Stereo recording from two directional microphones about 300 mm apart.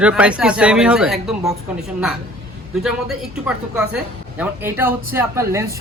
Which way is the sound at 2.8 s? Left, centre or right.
Centre.